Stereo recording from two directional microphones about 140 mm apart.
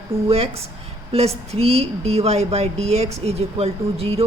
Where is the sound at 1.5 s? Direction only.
50° right (ahead or behind).